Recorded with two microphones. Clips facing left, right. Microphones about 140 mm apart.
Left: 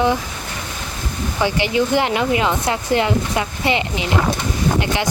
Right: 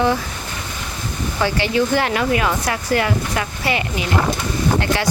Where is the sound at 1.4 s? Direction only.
15° left (ahead or behind).